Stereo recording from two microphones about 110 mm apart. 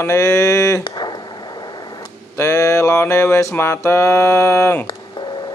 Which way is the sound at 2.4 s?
25° left (ahead or behind).